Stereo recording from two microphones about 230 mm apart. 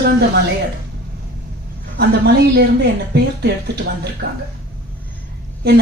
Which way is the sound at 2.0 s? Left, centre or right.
Right.